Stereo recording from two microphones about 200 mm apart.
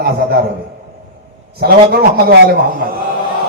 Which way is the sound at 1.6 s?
50° right (ahead or behind).